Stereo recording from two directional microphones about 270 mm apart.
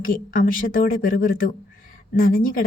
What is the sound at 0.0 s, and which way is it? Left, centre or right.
A woman's voice, left.